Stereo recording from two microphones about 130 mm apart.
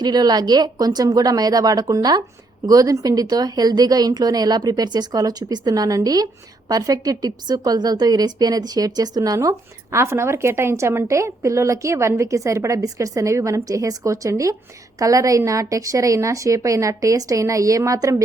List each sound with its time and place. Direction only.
0.0 s a woman's voice: 30° right (ahead or behind)